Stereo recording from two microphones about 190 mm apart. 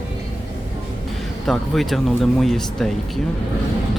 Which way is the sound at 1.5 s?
Centre (ahead or behind).